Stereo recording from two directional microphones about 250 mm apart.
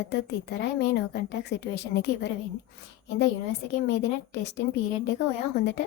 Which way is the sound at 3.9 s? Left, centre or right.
Left.